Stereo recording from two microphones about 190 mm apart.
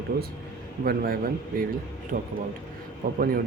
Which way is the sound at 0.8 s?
50° right (ahead or behind).